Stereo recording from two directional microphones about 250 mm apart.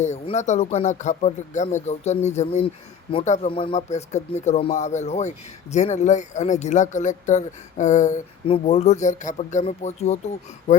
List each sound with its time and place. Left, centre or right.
0.0 s speech: left